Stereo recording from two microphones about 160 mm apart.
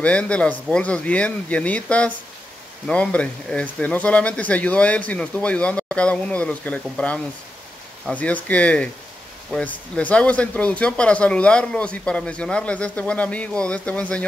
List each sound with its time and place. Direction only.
0.0 s speech: 5° left (ahead or behind)